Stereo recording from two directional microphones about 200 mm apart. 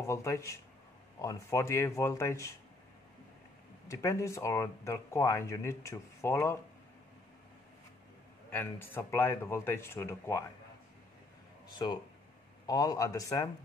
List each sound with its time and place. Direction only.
0.0 s speech: 15° left (ahead or behind)
3.9 s speech: 15° left (ahead or behind)
8.5 s speech: 10° left (ahead or behind)
12.6 s speech: 20° left (ahead or behind)